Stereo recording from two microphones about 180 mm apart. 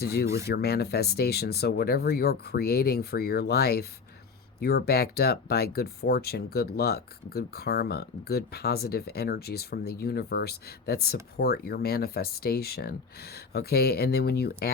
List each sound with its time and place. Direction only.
0.0 s speech: 60° left (ahead or behind)